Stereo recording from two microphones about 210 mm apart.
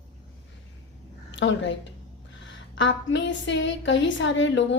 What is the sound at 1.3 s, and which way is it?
A woman's voice, 60° left (ahead or behind).